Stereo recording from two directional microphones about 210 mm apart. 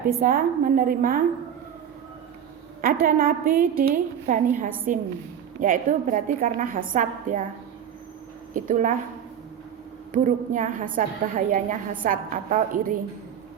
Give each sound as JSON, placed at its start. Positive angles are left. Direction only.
{"t": 0.2, "sound": "a woman's voice", "side_deg": -40}
{"t": 2.8, "sound": "a woman's voice", "side_deg": -45}
{"t": 8.5, "sound": "a woman's voice", "side_deg": -40}
{"t": 10.1, "sound": "a woman's voice", "side_deg": -35}